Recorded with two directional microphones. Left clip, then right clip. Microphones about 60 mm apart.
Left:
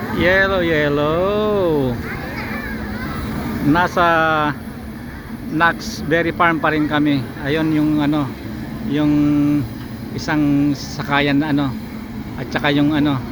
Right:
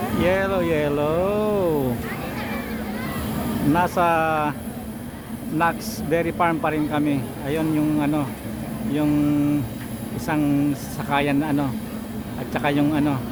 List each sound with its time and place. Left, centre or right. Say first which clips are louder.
0.2 s speech: left 7 dB; centre
3.8 s speech: left 6 dB; centre
5.5 s speech: left 6 dB; centre; by 8.3 s left
9.0 s speech: left 5 dB; centre
11.1 s speech: left 4 dB; left